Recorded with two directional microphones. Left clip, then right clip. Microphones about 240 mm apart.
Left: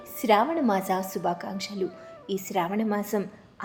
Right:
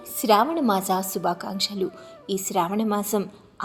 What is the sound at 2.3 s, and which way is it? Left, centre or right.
Speech, right.